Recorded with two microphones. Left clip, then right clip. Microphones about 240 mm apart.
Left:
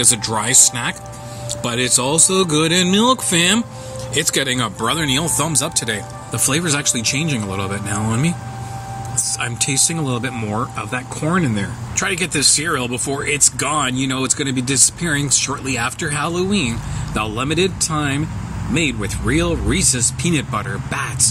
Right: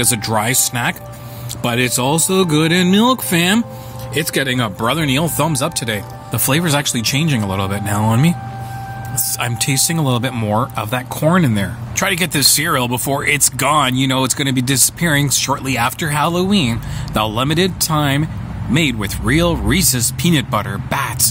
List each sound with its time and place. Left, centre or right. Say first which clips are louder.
0.0 s speech: right 2 dB; right
9.4 s speech: right 2 dB; right